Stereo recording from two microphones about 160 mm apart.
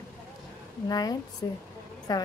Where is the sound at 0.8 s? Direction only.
25° left (ahead or behind).